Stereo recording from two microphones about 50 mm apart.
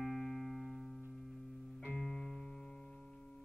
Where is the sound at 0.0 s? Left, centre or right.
Centre.